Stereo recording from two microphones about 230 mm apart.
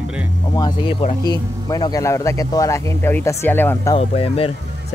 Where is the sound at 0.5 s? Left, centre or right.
Centre.